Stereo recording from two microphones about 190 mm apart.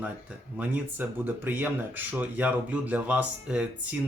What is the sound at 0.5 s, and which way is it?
Speech, 10° right (ahead or behind).